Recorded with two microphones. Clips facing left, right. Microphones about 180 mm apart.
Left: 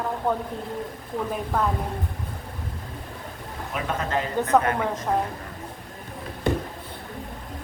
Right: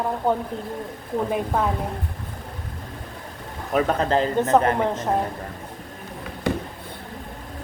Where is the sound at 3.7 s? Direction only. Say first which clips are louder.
Right 7 dB; 35° right (ahead or behind).